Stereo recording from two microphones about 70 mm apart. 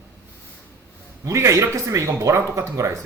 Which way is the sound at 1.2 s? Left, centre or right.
Right.